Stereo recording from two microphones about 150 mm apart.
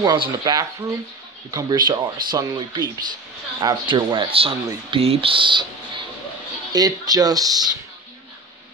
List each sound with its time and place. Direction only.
0.0 s speech: 30° right (ahead or behind)